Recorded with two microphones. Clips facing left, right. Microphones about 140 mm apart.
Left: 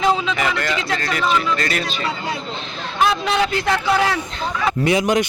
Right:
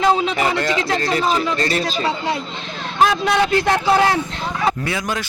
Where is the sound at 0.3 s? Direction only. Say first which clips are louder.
Right 3 dB; 30° right (ahead or behind).